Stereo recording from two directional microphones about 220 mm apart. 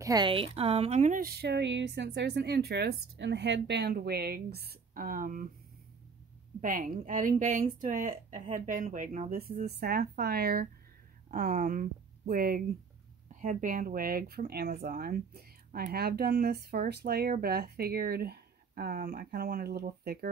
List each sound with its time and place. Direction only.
0.0 s speech: 20° right (ahead or behind); by 5.5 s 40° right (ahead or behind)
6.6 s a woman's voice: 40° right (ahead or behind)